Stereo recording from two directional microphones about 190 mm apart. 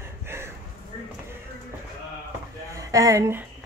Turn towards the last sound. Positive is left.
turn(degrees=-15)  # may be behind; listen again after turning